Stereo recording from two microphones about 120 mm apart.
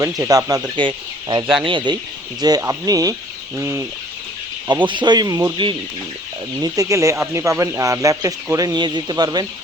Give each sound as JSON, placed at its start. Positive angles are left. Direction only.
{"t": 0.2, "sound": "speech", "side_deg": -30}
{"t": 0.8, "sound": "speech", "side_deg": -40}
{"t": 4.9, "sound": "speech", "side_deg": -40}